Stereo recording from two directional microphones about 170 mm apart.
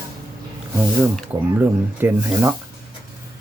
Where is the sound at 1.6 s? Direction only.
15° right (ahead or behind).